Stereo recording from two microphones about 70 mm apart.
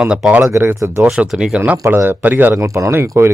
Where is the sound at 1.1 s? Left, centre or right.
Centre.